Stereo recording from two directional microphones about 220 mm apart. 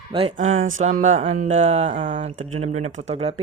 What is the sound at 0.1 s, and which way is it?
Speech, 25° right (ahead or behind).